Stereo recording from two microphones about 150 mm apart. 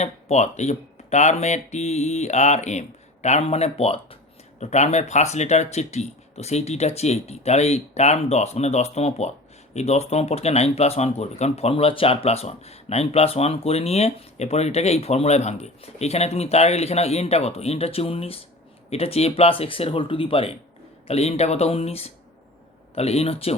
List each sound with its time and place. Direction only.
0.0 s speech: 50° left (ahead or behind)